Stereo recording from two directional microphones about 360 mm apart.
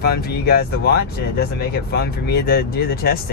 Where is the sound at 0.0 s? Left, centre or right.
Left.